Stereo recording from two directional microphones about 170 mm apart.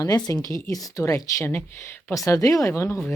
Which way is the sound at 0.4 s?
20° left (ahead or behind).